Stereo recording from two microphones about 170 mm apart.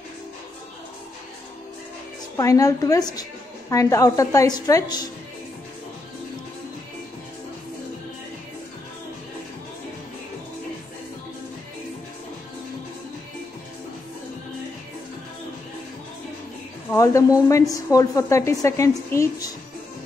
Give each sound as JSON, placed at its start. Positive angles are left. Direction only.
{"t": 2.3, "sound": "a woman's voice", "side_deg": 20}
{"t": 16.9, "sound": "a woman's voice", "side_deg": 20}